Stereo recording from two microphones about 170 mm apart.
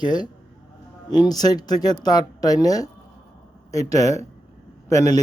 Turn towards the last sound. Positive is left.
turn(degrees=20)  # may be behind; listen again after turning